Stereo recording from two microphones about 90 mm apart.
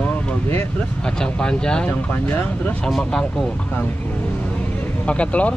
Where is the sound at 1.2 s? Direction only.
10° left (ahead or behind).